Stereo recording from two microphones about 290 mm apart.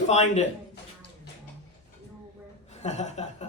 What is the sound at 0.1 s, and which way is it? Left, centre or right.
Speech, left.